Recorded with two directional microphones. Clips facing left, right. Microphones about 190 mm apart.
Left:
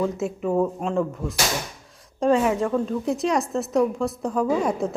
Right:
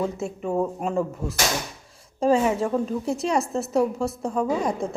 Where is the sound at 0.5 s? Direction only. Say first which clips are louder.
Left 1 dB; 10° right (ahead or behind).